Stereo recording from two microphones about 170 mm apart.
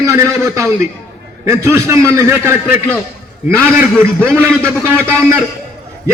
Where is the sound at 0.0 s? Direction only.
20° right (ahead or behind).